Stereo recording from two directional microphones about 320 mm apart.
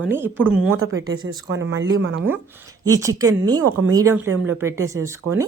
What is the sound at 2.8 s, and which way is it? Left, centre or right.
Speech, centre.